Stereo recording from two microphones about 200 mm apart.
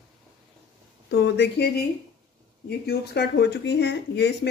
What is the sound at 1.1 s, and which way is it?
Speech, 55° left (ahead or behind).